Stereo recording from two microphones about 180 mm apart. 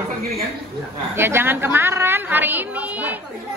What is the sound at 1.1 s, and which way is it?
A woman's voice, 15° right (ahead or behind).